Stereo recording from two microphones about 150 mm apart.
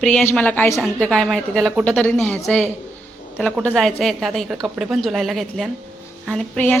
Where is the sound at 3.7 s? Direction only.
Centre (ahead or behind).